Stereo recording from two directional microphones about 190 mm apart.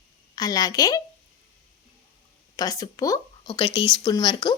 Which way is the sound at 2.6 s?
20° left (ahead or behind).